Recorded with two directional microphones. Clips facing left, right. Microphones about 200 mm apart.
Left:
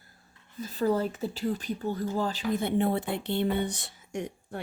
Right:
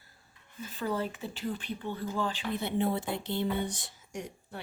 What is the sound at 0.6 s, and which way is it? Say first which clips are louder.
Speech: left 6 dB; 35° left (ahead or behind).